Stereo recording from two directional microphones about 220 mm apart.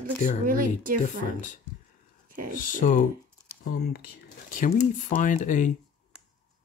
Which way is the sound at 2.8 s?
35° left (ahead or behind).